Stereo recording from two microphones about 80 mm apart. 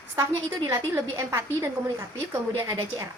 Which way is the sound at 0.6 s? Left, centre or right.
Right.